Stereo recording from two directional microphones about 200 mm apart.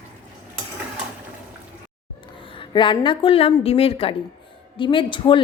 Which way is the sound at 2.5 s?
25° left (ahead or behind).